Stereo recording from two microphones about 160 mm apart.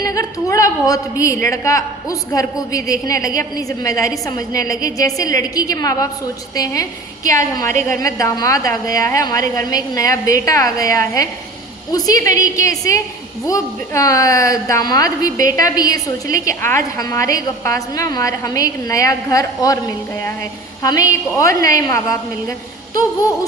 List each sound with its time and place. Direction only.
0.0 s a woman's voice: 20° left (ahead or behind)
7.3 s a woman's voice: 20° left (ahead or behind)
20.8 s a woman's voice: 20° left (ahead or behind)